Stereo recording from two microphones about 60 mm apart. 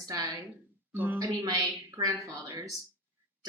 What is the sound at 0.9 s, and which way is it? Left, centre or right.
Speech, right.